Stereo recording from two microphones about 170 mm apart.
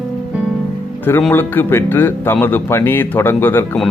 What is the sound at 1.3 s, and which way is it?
Speech, 10° left (ahead or behind).